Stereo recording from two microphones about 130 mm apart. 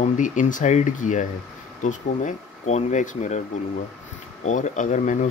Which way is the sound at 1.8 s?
65° left (ahead or behind).